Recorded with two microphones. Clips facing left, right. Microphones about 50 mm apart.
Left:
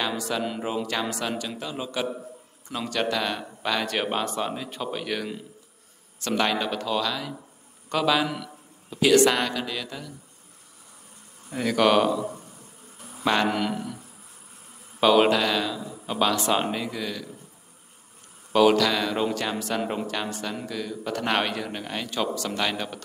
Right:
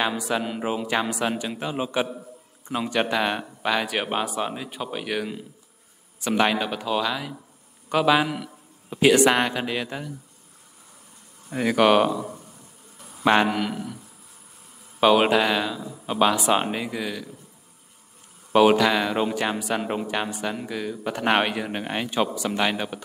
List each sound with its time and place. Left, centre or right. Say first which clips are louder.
0.1 s a man's voice: right 2 dB; centre
3.6 s a man's voice: right 1 dB; centre; by 10.1 s right
11.5 s a man's voice: right 2 dB; centre
13.5 s a man's voice: even; centre
15.0 s a man's voice: right 1 dB; centre
18.5 s a man's voice: right 2 dB; right